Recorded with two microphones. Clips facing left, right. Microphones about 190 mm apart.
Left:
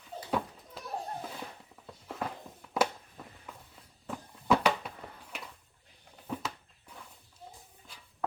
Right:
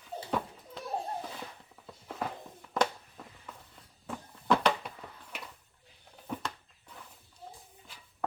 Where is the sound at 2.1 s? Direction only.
Centre (ahead or behind).